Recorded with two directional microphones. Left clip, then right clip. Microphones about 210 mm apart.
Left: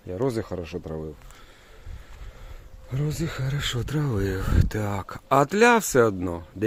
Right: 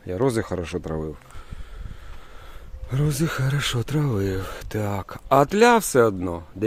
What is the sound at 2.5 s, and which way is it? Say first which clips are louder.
Speech: right 5 dB; 25° right (ahead or behind).